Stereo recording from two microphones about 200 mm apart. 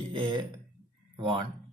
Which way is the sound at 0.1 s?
25° right (ahead or behind).